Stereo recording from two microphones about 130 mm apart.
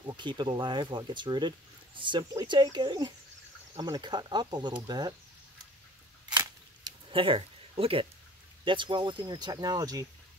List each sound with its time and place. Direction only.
0.0 s speech: 35° right (ahead or behind)
7.1 s speech: 45° right (ahead or behind)